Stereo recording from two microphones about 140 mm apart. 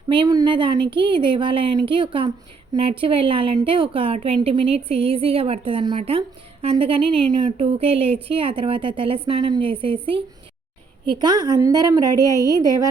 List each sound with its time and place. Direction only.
0.1 s a woman's voice: 30° right (ahead or behind)
7.6 s a woman's voice: 45° right (ahead or behind); by 12.9 s 25° right (ahead or behind)